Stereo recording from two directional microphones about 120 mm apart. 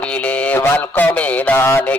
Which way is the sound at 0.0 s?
10° left (ahead or behind).